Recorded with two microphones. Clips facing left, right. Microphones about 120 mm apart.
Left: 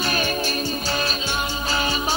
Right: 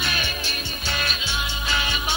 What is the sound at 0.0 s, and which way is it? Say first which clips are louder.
Music: left 5 dB; 40° left (ahead or behind).